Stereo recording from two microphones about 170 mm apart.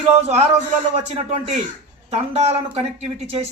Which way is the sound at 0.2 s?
40° right (ahead or behind).